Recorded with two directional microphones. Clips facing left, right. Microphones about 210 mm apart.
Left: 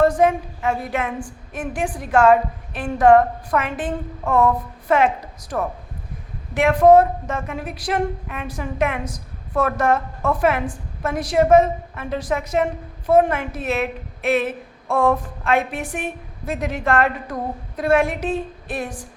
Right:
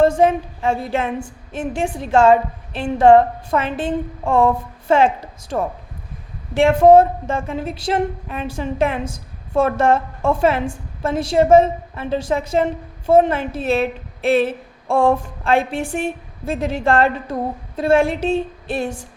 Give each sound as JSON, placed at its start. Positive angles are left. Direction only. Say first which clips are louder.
{"t": 0.0, "sound": "speech", "louder": "right 2 dB", "side_deg": -25}